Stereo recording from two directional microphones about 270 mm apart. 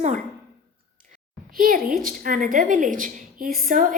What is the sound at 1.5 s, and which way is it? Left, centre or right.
A woman's voice, right.